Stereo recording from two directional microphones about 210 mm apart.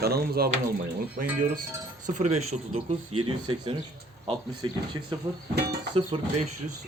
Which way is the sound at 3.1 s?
90° right.